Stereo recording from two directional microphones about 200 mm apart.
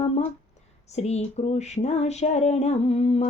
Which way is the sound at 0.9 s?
35° left (ahead or behind).